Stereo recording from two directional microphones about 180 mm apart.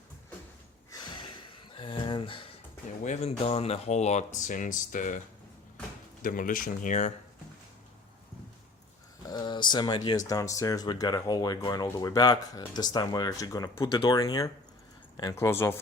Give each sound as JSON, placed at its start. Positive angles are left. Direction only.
{"t": 0.9, "sound": "a sound", "side_deg": 20}
{"t": 3.0, "sound": "speech", "side_deg": 40}
{"t": 6.2, "sound": "speech", "side_deg": 50}
{"t": 9.2, "sound": "speech", "side_deg": 25}